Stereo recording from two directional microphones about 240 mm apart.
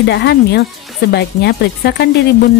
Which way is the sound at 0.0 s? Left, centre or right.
Left.